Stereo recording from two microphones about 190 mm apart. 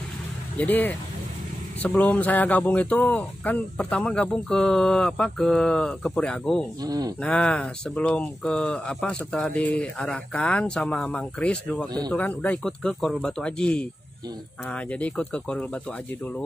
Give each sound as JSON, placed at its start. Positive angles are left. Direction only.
{"t": 0.6, "sound": "speech", "side_deg": 10}
{"t": 6.8, "sound": "speech", "side_deg": -20}
{"t": 7.2, "sound": "speech", "side_deg": 5}